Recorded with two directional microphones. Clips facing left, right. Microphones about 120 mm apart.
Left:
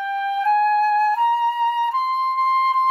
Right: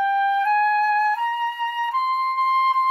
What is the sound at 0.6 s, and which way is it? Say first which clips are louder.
Flute: left 2 dB; 35° left (ahead or behind).